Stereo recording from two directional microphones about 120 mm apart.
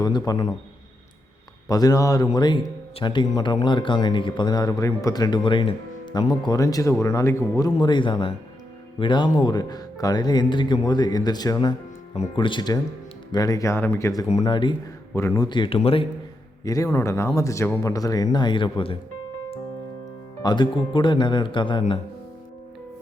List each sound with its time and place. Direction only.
0.0 s speech: 30° left (ahead or behind)
1.6 s speech: 30° left (ahead or behind)
7.8 s speech: 40° left (ahead or behind); by 14.1 s 20° left (ahead or behind)
14.4 s speech: 40° left (ahead or behind)
15.1 s speech: 25° left (ahead or behind)
15.4 s speech: 40° left (ahead or behind)
16.6 s speech: 30° left (ahead or behind); by 18.9 s 45° left (ahead or behind)
20.4 s speech: 40° left (ahead or behind)